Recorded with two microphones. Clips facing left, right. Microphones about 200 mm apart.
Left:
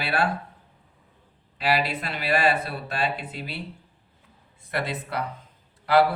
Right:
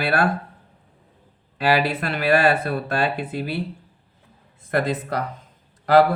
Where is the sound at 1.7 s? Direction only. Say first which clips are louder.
Right 4 dB; 50° right (ahead or behind).